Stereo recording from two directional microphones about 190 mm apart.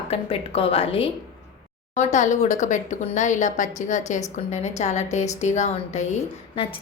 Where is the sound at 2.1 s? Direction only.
40° left (ahead or behind).